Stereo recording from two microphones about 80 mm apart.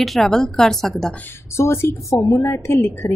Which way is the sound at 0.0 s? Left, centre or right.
Centre.